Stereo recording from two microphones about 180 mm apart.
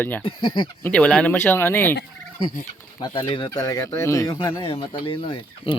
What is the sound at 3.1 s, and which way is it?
Speech, 25° left (ahead or behind).